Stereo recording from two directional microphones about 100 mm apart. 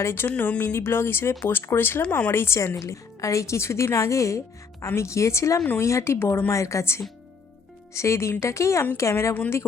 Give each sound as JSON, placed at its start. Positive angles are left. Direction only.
{"t": 0.0, "sound": "speech", "side_deg": 25}
{"t": 9.3, "sound": "a woman's voice", "side_deg": 15}